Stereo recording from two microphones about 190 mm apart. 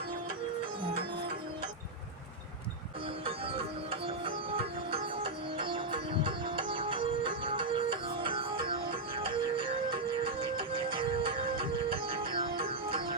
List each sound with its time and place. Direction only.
3.2 s music: 30° right (ahead or behind)